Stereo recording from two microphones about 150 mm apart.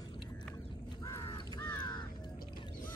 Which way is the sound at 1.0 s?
25° left (ahead or behind).